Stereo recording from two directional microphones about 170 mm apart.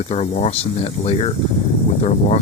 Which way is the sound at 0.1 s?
40° left (ahead or behind).